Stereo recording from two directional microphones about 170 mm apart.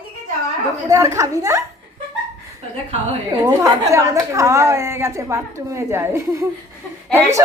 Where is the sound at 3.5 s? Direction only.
15° right (ahead or behind).